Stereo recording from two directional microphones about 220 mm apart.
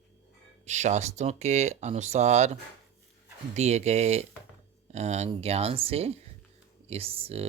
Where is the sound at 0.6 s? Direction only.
30° right (ahead or behind).